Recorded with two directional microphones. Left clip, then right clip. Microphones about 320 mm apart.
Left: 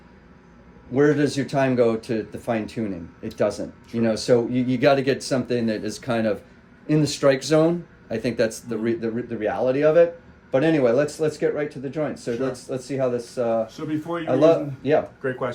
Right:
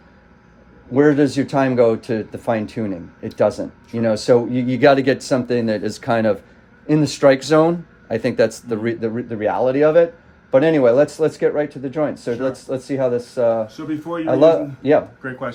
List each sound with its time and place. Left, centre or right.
0.9 s speech: right
13.7 s speech: centre
14.3 s speech: right
15.2 s speech: centre